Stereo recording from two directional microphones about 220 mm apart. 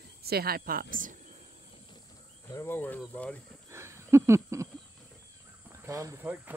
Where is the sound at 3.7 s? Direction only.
10° right (ahead or behind).